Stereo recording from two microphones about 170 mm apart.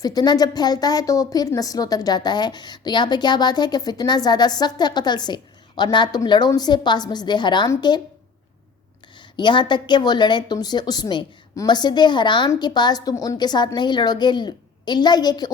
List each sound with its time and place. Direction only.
0.0 s a woman's voice: 25° left (ahead or behind)
9.3 s a woman's voice: 25° left (ahead or behind)